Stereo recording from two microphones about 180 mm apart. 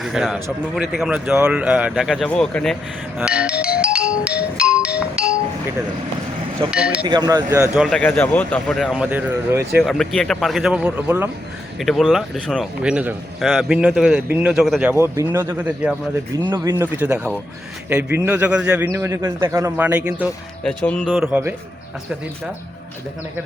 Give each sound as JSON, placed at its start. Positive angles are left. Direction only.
{"t": 0.0, "sound": "a man's voice", "side_deg": 0}
{"t": 3.2, "sound": "music", "side_deg": -5}
{"t": 6.7, "sound": "a man's voice", "side_deg": -5}
{"t": 7.0, "sound": "speech", "side_deg": -25}
{"t": 7.7, "sound": "a man's voice", "side_deg": 0}
{"t": 9.8, "sound": "a man's voice", "side_deg": 0}
{"t": 16.4, "sound": "speech", "side_deg": -20}
{"t": 20.7, "sound": "a man's voice", "side_deg": 5}